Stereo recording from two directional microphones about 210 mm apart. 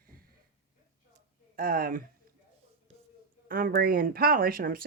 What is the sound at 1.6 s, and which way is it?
Speech, 40° right (ahead or behind).